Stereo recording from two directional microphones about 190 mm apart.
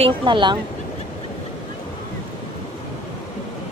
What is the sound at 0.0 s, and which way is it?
Speech, 25° right (ahead or behind).